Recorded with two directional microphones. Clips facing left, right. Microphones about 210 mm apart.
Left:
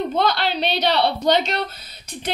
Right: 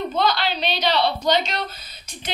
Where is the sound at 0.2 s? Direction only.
60° left (ahead or behind).